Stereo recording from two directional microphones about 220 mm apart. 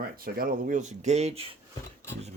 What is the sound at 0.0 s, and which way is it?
Speech, 40° right (ahead or behind).